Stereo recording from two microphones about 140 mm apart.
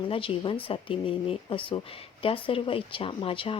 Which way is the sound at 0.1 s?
40° left (ahead or behind).